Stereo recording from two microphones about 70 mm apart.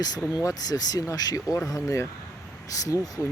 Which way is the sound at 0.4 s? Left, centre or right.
Left.